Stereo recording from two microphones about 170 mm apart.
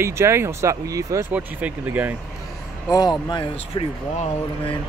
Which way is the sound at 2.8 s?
25° left (ahead or behind).